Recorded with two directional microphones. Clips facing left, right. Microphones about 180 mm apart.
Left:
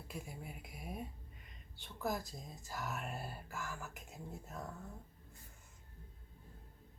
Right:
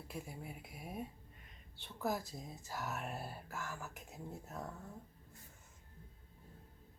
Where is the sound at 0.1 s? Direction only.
Centre (ahead or behind).